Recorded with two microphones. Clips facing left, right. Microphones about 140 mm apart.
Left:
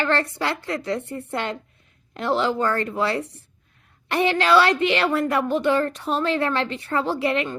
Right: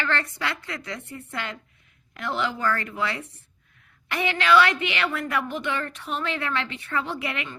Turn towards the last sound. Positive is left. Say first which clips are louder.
# left 8 dB
turn(degrees=35)  # may be behind; listen again after turning